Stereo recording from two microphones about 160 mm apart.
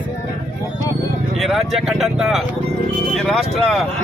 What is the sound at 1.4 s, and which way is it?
Speech, centre (ahead or behind).